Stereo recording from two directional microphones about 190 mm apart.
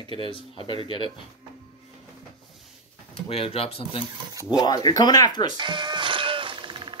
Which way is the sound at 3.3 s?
30° left (ahead or behind).